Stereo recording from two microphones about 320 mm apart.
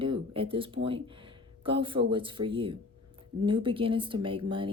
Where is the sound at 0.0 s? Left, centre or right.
Centre.